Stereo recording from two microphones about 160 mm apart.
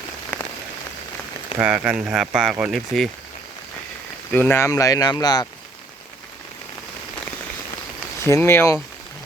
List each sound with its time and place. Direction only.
0.3 s rain on surface: 10° left (ahead or behind)
1.5 s speech: 10° right (ahead or behind)
4.3 s speech: 10° left (ahead or behind)
8.2 s speech: 15° left (ahead or behind)